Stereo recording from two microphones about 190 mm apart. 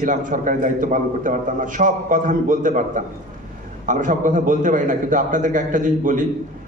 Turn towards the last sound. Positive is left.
turn(degrees=-45)  # may be behind; listen again after turning